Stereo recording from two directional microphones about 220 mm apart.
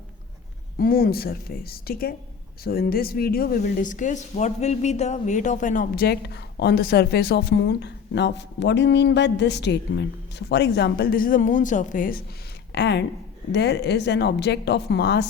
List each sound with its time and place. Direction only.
0.8 s speech: 45° left (ahead or behind)
12.7 s speech: 50° left (ahead or behind)